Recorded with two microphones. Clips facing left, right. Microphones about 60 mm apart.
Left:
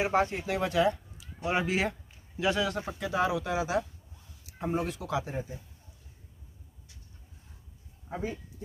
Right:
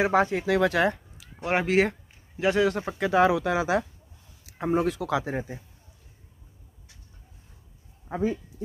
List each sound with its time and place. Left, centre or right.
0.0 s speech: right
2.9 s speech: right